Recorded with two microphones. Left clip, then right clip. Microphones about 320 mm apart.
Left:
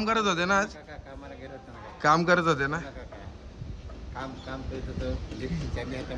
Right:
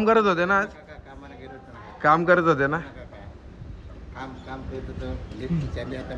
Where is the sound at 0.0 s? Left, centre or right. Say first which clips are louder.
Right 6 dB; centre.